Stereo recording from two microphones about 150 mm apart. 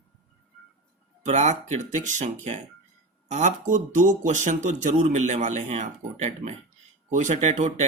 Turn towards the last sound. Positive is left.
turn(degrees=-50)  # may be behind; listen again after turning